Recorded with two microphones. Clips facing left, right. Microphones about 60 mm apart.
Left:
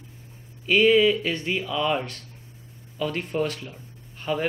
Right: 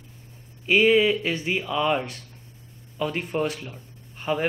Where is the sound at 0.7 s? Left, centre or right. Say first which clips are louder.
Even; centre.